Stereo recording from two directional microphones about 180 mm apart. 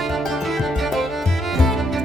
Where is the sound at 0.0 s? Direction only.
Centre (ahead or behind).